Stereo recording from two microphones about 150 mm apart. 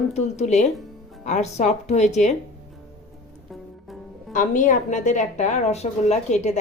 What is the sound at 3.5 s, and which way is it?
Music, centre (ahead or behind).